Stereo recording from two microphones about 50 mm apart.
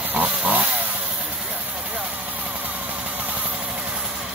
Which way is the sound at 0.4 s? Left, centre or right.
Right.